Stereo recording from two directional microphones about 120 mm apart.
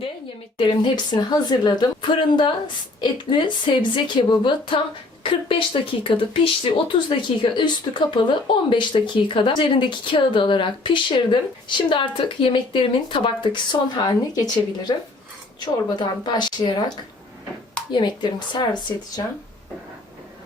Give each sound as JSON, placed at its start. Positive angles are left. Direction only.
{"t": 0.6, "sound": "a woman's voice", "side_deg": 45}
{"t": 17.9, "sound": "a woman's voice", "side_deg": 40}